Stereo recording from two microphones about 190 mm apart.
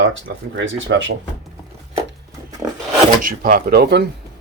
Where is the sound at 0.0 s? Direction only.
75° right (ahead or behind).